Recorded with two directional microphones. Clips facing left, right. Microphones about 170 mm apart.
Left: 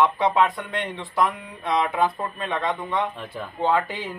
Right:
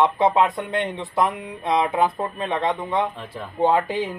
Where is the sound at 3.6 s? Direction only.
20° right (ahead or behind).